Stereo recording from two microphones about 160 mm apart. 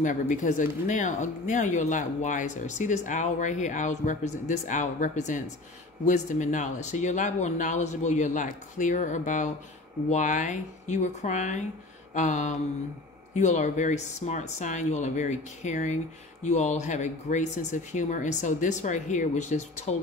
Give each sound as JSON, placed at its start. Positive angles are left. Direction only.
{"t": 0.0, "sound": "speech", "side_deg": 50}
{"t": 12.1, "sound": "a sound", "side_deg": 50}
{"t": 13.3, "sound": "speech", "side_deg": 45}